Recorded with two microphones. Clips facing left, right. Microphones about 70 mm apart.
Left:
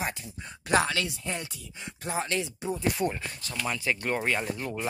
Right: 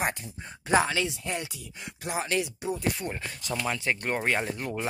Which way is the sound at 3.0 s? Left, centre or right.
Left.